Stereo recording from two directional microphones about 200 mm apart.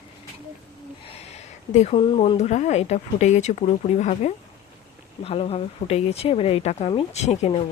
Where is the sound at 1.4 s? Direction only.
35° left (ahead or behind).